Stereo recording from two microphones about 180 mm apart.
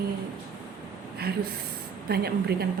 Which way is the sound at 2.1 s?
60° right (ahead or behind).